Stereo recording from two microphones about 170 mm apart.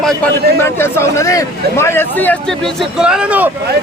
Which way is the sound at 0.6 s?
15° left (ahead or behind).